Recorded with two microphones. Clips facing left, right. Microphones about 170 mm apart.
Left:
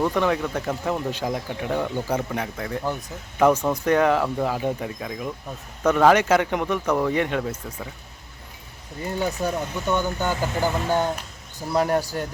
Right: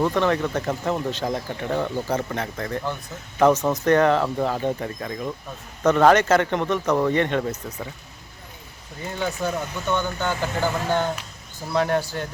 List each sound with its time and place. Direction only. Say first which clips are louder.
0.0 s speech: right 1 dB; 10° left (ahead or behind)
9.1 s speech: left 1 dB; 10° left (ahead or behind)